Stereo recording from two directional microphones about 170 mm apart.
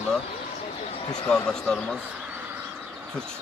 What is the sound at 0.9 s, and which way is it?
Speech, 25° left (ahead or behind).